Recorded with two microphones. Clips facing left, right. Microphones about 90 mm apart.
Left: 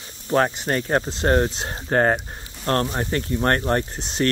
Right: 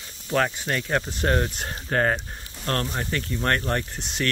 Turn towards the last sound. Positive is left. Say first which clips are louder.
# left 5 dB
turn(degrees=30)  # may be behind; listen again after turning